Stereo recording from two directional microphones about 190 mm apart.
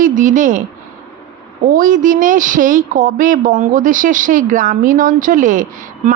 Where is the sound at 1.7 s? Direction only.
45° right (ahead or behind).